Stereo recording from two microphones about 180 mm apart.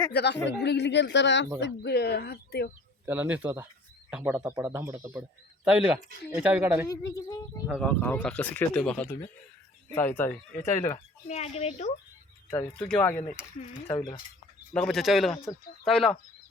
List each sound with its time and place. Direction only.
0.1 s speech: 65° left (ahead or behind)
3.1 s speech: 10° right (ahead or behind)
6.8 s speech: 20° left (ahead or behind)
7.8 s speech: 5° left (ahead or behind)
10.9 s speech: 35° left (ahead or behind)
12.5 s speech: 10° left (ahead or behind)
13.7 s speech: 30° left (ahead or behind)
14.7 s speech: 5° left (ahead or behind)